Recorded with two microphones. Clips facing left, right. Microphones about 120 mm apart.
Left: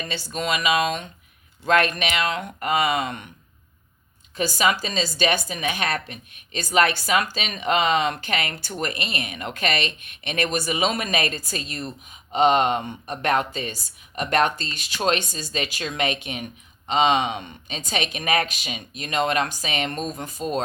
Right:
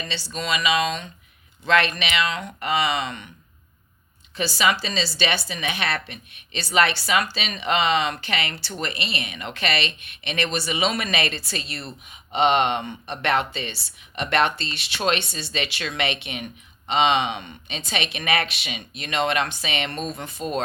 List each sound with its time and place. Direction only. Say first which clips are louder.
0.0 s a woman's voice: left 2 dB; 50° left (ahead or behind)
4.4 s a woman's voice: left 1 dB; 45° left (ahead or behind)